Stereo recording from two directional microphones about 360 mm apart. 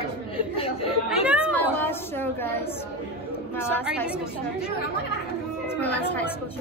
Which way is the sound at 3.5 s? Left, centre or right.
Centre.